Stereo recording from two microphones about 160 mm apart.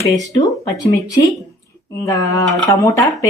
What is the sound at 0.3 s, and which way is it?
Speech, 20° left (ahead or behind).